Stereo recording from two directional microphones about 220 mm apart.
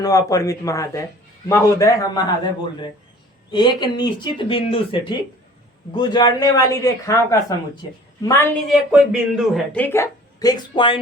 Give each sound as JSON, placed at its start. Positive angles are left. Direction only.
{"t": 0.0, "sound": "speech", "side_deg": 15}
{"t": 3.5, "sound": "speech", "side_deg": 20}
{"t": 8.7, "sound": "speech", "side_deg": -5}